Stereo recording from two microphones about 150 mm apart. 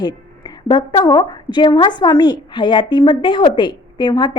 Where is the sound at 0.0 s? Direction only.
30° left (ahead or behind).